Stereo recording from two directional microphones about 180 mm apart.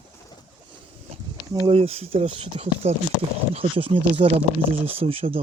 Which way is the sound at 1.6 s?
35° right (ahead or behind).